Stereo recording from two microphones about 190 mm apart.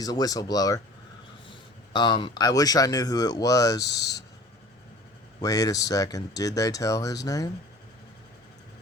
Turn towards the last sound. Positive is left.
turn(degrees=20)  # may be behind; listen again after turning